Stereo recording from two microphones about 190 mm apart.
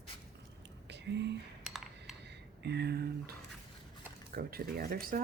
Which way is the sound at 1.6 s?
Centre (ahead or behind).